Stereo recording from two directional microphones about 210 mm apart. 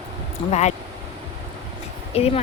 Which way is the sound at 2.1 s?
30° left (ahead or behind).